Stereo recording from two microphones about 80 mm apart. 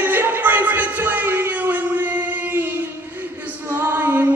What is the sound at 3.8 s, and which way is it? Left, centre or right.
Music, right.